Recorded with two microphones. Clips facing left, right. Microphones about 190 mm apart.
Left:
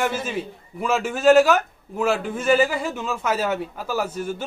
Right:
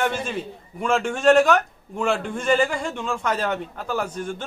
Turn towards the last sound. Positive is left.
turn(degrees=5)  # may be behind; listen again after turning